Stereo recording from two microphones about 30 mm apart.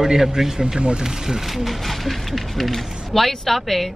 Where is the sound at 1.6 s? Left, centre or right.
Centre.